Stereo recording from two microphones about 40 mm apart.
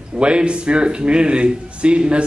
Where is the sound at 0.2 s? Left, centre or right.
Right.